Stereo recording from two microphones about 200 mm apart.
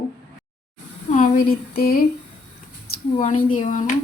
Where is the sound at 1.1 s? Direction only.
45° left (ahead or behind).